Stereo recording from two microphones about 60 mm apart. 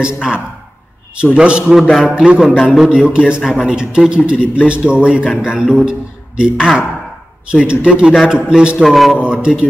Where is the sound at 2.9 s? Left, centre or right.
Centre.